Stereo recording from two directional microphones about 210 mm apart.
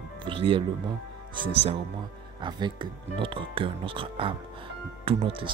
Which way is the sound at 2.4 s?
20° right (ahead or behind).